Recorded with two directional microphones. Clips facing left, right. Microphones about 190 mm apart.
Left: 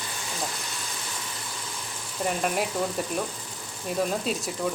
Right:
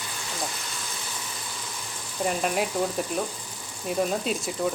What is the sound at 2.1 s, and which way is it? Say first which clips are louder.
Speech: right 1 dB; centre (ahead or behind).